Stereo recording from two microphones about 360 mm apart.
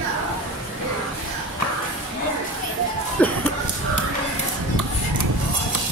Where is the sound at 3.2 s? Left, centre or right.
Centre.